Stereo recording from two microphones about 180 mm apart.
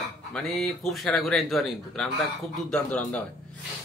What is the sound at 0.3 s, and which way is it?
A man's voice, 5° left (ahead or behind).